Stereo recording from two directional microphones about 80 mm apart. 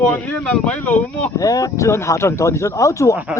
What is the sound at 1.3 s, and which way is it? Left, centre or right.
Speech, left.